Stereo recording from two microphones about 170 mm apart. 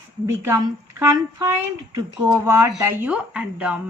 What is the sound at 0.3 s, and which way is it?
Speech, 15° right (ahead or behind).